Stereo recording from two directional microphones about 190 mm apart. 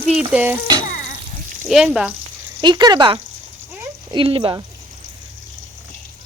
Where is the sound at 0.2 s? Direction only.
10° right (ahead or behind).